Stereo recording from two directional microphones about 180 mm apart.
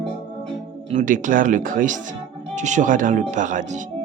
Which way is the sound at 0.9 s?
45° right (ahead or behind).